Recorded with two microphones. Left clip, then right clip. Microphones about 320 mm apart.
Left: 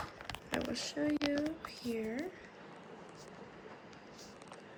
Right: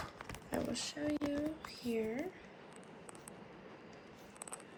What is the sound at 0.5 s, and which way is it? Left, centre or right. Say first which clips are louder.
Speech: left 2 dB; centre.